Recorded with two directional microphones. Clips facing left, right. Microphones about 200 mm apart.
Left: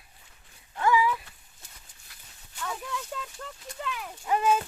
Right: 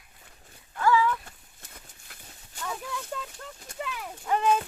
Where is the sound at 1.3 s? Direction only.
55° right (ahead or behind).